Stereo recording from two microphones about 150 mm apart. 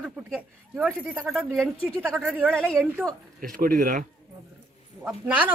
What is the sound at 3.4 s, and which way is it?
Speech, 65° right (ahead or behind).